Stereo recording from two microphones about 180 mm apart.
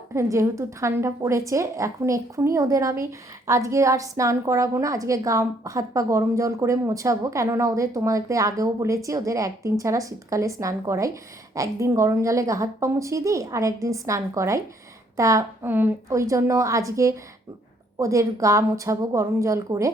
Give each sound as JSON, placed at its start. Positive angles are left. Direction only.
{"t": 0.1, "sound": "a woman's voice", "side_deg": -15}